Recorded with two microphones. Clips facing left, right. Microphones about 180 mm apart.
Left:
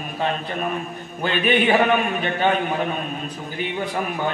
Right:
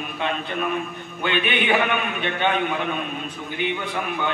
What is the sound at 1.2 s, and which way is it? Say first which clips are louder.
Music: left 4 dB; 40° left (ahead or behind).